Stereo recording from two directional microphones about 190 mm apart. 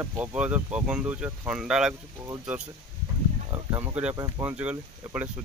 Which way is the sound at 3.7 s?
10° right (ahead or behind).